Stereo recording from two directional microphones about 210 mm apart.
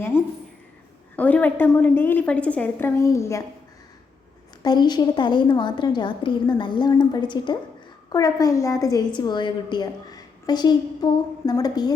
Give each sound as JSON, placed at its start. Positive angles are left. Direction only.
{"t": 1.1, "sound": "a woman's voice", "side_deg": 5}
{"t": 4.6, "sound": "a woman's voice", "side_deg": 20}